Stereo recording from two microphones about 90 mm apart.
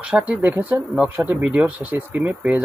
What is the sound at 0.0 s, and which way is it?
Speech, 15° right (ahead or behind).